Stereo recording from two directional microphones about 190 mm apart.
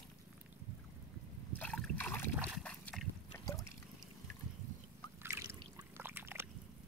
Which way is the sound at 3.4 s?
20° left (ahead or behind).